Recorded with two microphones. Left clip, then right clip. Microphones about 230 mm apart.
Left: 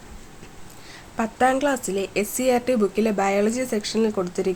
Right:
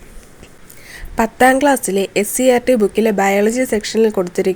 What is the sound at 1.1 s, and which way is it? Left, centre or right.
A woman's voice, right.